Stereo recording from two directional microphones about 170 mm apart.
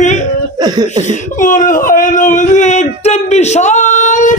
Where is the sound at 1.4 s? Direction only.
50° left (ahead or behind).